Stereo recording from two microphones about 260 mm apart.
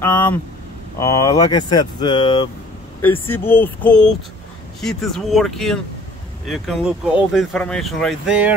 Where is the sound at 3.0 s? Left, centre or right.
Centre.